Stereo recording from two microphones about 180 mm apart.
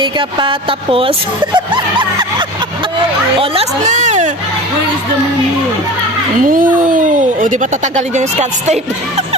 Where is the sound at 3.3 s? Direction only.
30° right (ahead or behind).